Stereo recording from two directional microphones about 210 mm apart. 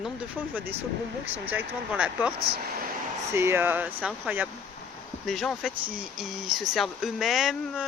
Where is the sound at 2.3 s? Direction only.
45° right (ahead or behind).